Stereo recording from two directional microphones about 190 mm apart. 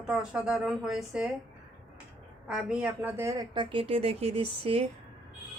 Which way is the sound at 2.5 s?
5° right (ahead or behind).